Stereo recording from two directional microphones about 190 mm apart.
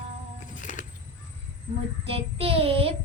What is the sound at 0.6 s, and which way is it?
Music, 40° left (ahead or behind).